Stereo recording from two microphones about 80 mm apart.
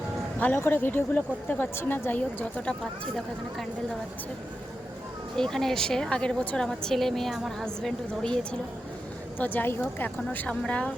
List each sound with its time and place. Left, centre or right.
0.3 s a woman's voice: left
5.4 s speech: centre
6.7 s a woman's voice: centre
9.4 s a woman's voice: left